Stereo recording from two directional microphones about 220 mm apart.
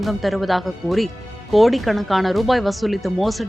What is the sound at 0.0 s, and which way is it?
Speech, centre (ahead or behind).